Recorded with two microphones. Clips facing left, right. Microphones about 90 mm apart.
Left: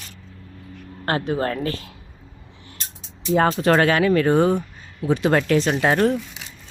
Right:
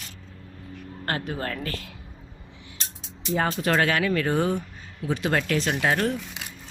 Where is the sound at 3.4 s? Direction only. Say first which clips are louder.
Left 6 dB; 45° left (ahead or behind).